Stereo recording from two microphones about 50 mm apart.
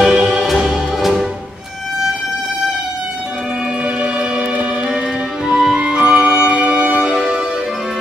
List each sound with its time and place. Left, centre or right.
0.0 s music: centre
3.8 s music: right
5.5 s music: centre
5.9 s music: right